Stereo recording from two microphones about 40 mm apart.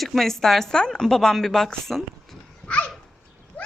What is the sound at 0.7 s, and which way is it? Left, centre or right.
Speech, centre.